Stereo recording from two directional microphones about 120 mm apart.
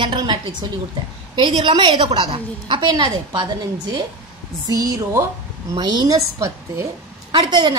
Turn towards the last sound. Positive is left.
turn(degrees=-40)  # may be behind; listen again after turning